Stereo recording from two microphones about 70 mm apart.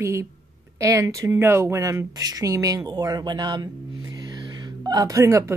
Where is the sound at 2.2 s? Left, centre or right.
Right.